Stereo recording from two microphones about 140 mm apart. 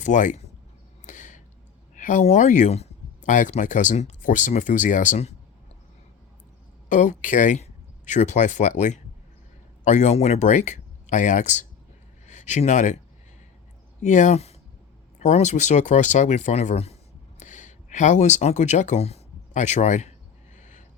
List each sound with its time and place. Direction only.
0.0 s speech: 60° left (ahead or behind)
1.0 s a sound: 60° left (ahead or behind)
2.0 s speech: 65° left (ahead or behind)
6.8 s speech: 65° left (ahead or behind)
14.0 s speech: 60° left (ahead or behind)
17.4 s speech: 60° left (ahead or behind)
20.6 s a sound: 65° left (ahead or behind)